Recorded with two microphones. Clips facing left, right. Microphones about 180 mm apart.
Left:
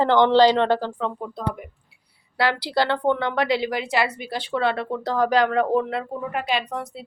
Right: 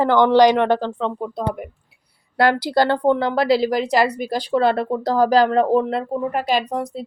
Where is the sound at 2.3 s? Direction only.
45° right (ahead or behind).